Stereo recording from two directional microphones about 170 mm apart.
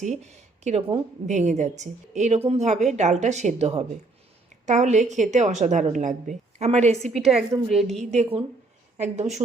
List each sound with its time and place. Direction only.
0.0 s a woman's voice: 45° right (ahead or behind)
7.0 s a woman's voice: centre (ahead or behind)
7.9 s a woman's voice: 40° right (ahead or behind)